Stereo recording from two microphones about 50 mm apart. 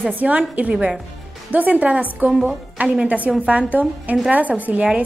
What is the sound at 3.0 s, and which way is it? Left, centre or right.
A woman's voice, right.